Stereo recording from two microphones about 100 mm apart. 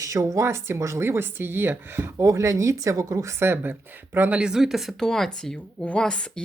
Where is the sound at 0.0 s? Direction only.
35° right (ahead or behind).